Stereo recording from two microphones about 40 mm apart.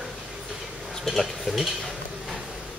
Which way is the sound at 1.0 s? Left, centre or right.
Centre.